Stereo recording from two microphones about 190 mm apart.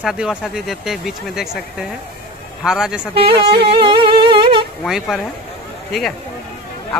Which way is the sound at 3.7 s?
25° right (ahead or behind).